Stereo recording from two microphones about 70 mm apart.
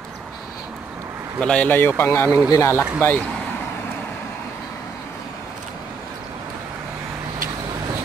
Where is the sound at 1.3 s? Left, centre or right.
Centre.